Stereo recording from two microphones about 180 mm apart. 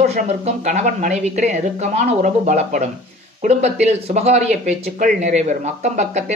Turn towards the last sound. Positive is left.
turn(degrees=-40)  # may be behind; listen again after turning